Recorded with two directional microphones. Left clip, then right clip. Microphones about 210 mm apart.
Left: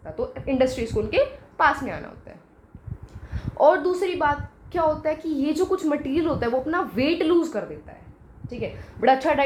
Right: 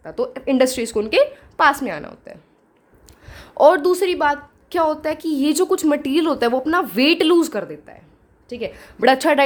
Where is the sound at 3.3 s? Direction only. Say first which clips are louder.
Right 5 dB; 55° right (ahead or behind).